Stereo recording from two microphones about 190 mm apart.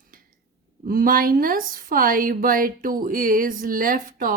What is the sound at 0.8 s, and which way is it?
A woman's voice, 50° right (ahead or behind).